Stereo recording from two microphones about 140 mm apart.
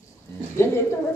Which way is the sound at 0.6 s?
20° left (ahead or behind).